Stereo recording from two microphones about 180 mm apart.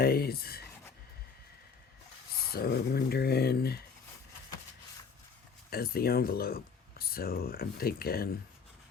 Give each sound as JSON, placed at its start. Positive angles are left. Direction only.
{"t": 0.0, "sound": "speech", "side_deg": 60}
{"t": 2.5, "sound": "speech", "side_deg": 60}
{"t": 5.7, "sound": "speech", "side_deg": 55}